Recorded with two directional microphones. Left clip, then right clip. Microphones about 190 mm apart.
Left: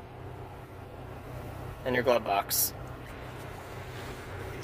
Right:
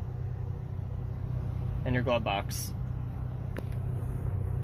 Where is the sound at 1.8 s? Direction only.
25° left (ahead or behind).